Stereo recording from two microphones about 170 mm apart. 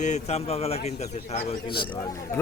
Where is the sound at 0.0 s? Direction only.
40° left (ahead or behind).